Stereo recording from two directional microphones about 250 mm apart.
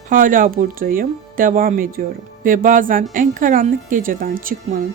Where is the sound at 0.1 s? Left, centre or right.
Right.